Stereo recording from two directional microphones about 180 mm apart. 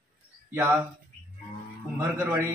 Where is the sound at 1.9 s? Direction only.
15° right (ahead or behind).